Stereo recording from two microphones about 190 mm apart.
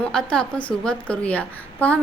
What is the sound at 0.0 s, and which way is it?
A woman's voice, 5° left (ahead or behind).